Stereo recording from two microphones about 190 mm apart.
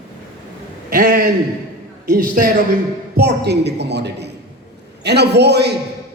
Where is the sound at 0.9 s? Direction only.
50° right (ahead or behind).